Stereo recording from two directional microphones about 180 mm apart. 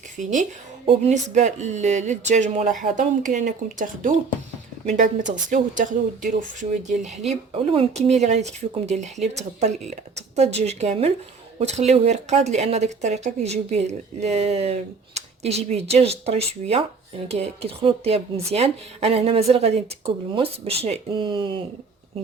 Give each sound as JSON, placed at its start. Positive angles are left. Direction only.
{"t": 0.2, "sound": "speech", "side_deg": -45}
{"t": 7.3, "sound": "speech", "side_deg": -35}